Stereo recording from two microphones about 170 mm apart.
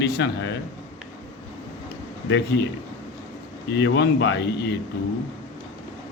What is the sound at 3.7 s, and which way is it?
A man's voice, 90° left.